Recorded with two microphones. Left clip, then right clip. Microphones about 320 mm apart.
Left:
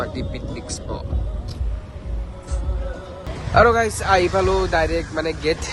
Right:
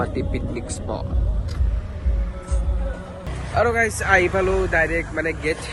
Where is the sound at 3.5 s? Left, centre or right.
Centre.